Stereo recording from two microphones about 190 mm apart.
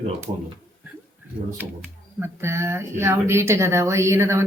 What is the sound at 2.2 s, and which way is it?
Speech, 15° right (ahead or behind).